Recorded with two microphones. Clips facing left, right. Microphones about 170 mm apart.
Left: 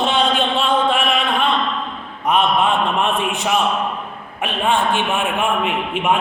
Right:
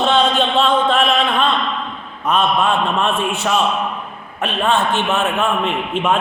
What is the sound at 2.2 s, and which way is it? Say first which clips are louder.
A man's voice: even; 15° left (ahead or behind).